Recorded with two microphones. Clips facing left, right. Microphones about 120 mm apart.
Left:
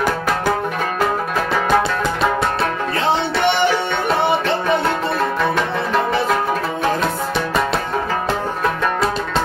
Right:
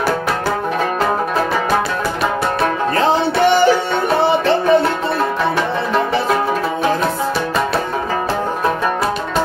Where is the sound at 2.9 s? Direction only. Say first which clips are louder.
Right 4 dB; 40° right (ahead or behind).